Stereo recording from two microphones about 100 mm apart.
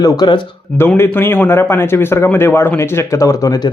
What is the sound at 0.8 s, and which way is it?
A man's voice, 25° left (ahead or behind).